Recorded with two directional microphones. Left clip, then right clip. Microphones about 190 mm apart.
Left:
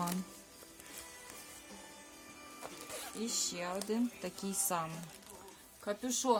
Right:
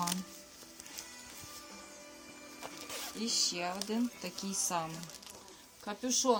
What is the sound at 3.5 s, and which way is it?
A woman's voice, 20° left (ahead or behind).